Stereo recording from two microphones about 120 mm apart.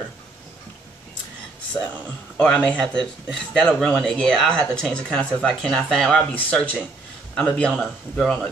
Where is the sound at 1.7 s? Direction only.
25° left (ahead or behind).